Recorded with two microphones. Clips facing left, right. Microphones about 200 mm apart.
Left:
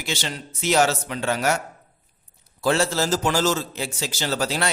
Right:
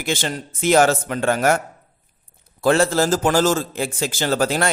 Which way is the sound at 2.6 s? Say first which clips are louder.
Right 5 dB; 50° right (ahead or behind).